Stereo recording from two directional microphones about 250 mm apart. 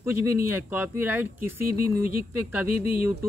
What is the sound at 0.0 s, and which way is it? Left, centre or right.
A man's voice, centre.